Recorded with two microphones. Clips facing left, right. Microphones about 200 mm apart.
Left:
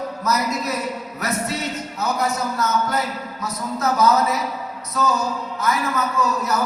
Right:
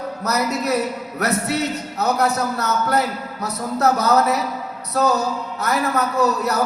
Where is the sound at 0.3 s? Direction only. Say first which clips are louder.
Right 1 dB; 65° right (ahead or behind).